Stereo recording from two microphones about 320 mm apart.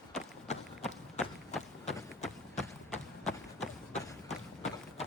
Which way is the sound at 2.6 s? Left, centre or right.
Centre.